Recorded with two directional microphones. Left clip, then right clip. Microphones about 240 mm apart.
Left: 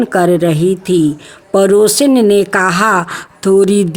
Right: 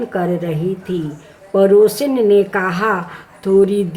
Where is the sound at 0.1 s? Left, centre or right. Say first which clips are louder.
Left 9 dB; left.